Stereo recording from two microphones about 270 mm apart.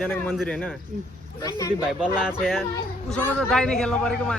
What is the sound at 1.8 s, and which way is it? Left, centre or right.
A man's voice, centre.